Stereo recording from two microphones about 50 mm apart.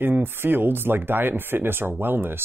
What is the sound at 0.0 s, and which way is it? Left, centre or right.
Speech, right.